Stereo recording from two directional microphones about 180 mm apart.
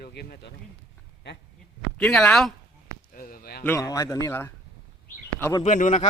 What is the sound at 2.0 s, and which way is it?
Speech, 5° left (ahead or behind).